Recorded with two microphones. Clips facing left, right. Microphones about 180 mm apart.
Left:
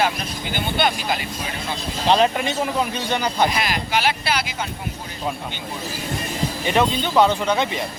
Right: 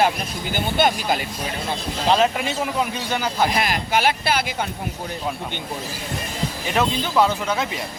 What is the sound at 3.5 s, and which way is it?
Speech, 50° right (ahead or behind).